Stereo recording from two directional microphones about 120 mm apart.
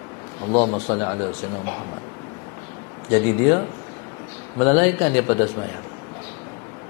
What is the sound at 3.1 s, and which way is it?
A man's voice, 25° left (ahead or behind).